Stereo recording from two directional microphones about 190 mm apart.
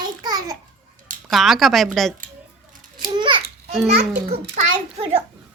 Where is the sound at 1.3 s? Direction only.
Centre (ahead or behind).